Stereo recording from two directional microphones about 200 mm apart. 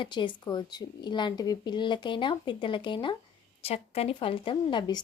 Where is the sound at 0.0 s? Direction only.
25° left (ahead or behind).